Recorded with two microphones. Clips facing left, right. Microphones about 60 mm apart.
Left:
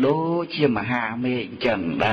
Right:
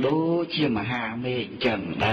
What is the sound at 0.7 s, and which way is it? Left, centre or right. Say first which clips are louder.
A man's voice: left 3 dB; left.